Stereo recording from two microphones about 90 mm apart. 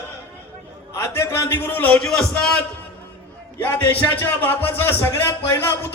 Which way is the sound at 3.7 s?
25° left (ahead or behind).